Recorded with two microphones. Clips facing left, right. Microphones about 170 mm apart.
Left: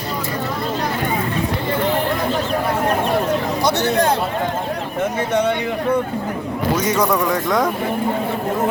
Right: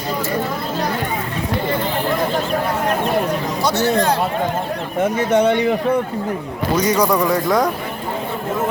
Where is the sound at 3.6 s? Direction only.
15° left (ahead or behind).